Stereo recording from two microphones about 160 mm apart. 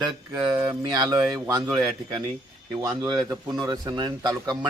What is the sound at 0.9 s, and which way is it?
A man's voice, 25° right (ahead or behind).